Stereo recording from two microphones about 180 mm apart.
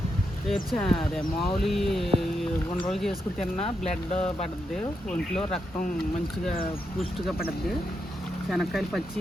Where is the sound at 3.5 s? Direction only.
35° left (ahead or behind).